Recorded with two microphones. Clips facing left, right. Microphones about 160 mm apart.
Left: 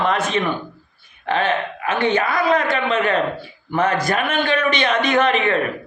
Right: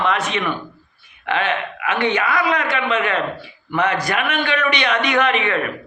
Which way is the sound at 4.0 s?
30° left (ahead or behind).